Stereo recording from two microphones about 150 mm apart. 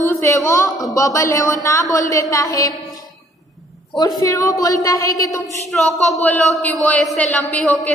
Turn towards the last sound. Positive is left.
turn(degrees=10)  # may be behind; listen again after turning